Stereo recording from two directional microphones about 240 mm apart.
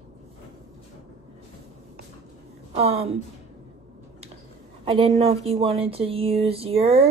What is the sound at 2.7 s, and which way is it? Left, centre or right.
Speech, right.